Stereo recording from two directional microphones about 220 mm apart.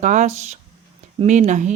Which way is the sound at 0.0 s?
35° right (ahead or behind).